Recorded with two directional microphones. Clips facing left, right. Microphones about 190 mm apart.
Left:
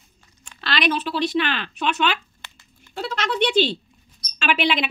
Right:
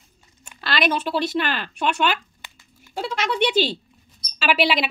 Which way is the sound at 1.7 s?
10° right (ahead or behind).